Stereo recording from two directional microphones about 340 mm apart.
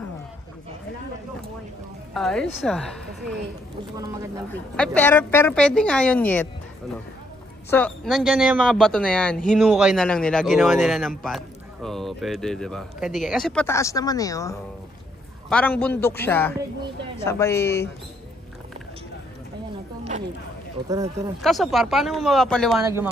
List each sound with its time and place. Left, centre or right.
2.1 s speech: centre
3.9 s speech: centre
4.5 s speech: centre
7.7 s speech: centre
20.1 s a sound: right
20.9 s speech: centre